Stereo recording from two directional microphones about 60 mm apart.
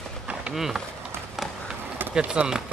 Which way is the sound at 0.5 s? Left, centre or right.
Centre.